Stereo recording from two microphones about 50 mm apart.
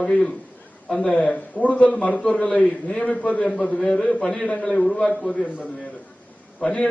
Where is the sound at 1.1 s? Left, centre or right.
Left.